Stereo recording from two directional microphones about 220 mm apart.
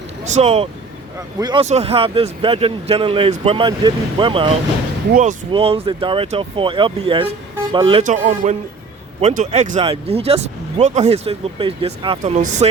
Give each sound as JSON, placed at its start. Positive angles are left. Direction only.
{"t": 0.3, "sound": "speech", "side_deg": -30}
{"t": 5.5, "sound": "speech", "side_deg": -25}